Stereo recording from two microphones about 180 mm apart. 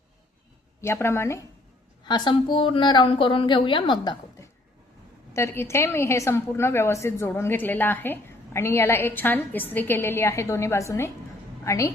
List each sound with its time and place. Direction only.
0.8 s a woman's voice: 15° left (ahead or behind)